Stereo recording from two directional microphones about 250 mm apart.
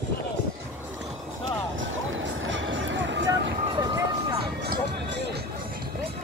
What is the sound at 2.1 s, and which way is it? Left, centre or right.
Music, right.